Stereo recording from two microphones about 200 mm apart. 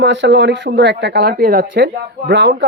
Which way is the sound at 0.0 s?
65° right (ahead or behind).